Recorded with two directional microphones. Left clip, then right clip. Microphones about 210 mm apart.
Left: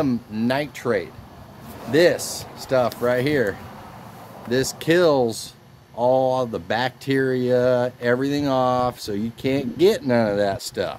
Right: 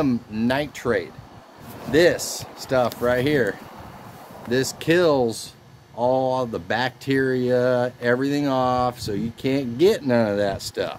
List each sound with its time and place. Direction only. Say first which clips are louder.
0.0 s speech: even; 5° right (ahead or behind)